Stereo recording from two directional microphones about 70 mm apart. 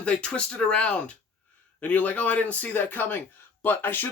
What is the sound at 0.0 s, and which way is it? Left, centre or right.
Speech, centre.